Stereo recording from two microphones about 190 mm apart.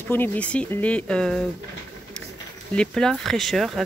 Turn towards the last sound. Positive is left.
turn(degrees=0)  # may be behind; listen again after turning